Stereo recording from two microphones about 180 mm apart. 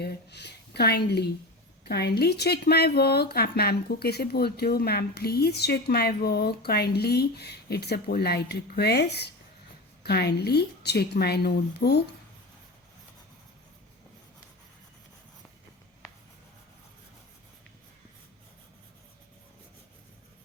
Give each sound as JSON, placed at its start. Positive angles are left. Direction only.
{"t": 0.0, "sound": "a woman's voice", "side_deg": 65}